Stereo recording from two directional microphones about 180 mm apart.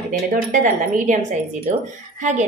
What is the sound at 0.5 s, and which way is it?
A woman's voice, 45° right (ahead or behind).